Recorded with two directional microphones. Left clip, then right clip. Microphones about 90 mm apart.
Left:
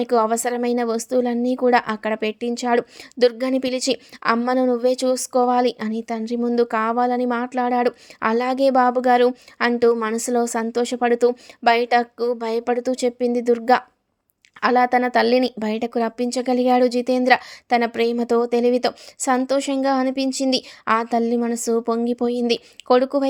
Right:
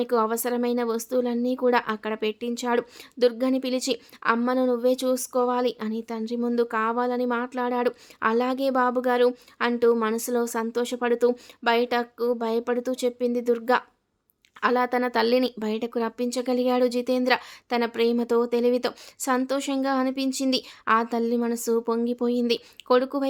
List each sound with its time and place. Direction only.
0.0 s a woman's voice: 55° left (ahead or behind); by 9.9 s 70° left (ahead or behind)
9.9 s a woman's voice: 55° left (ahead or behind)